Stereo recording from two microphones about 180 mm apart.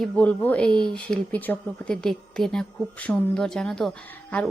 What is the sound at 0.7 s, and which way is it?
Speech, 25° right (ahead or behind).